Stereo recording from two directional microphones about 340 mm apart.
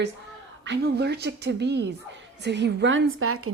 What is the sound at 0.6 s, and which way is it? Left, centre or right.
A woman's voice, right.